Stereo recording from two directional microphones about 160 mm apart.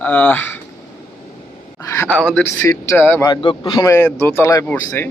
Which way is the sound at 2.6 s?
20° left (ahead or behind).